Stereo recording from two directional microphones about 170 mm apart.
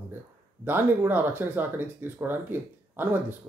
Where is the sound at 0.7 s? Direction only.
10° right (ahead or behind).